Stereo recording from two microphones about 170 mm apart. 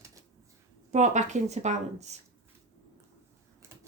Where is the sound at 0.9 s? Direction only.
45° right (ahead or behind).